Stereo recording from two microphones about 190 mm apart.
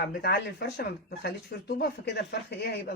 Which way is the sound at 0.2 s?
60° left (ahead or behind).